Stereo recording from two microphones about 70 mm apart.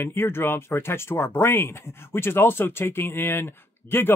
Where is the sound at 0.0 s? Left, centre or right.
Left.